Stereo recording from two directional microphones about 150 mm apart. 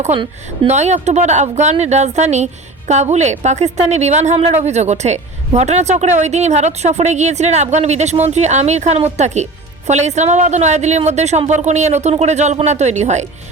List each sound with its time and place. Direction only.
0.7 s a woman's voice: 50° right (ahead or behind)